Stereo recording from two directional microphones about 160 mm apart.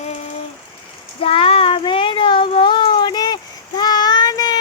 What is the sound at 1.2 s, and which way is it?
Child singing, 35° left (ahead or behind).